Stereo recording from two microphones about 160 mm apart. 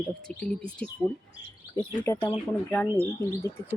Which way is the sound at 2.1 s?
15° left (ahead or behind).